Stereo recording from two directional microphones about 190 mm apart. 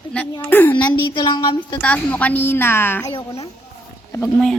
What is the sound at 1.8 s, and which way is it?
Speech, 10° left (ahead or behind).